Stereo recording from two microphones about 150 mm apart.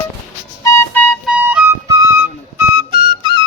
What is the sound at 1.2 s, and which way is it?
Music, 10° right (ahead or behind).